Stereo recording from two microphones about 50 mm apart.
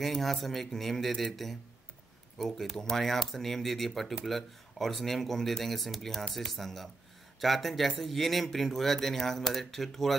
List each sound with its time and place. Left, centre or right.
0.2 s speech: centre